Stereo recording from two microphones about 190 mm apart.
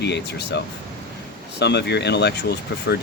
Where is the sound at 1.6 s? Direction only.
60° left (ahead or behind).